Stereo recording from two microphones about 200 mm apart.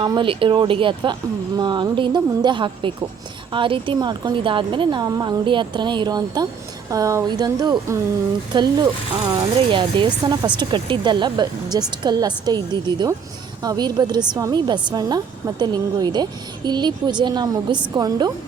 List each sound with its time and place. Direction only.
0.0 s speech: 20° right (ahead or behind)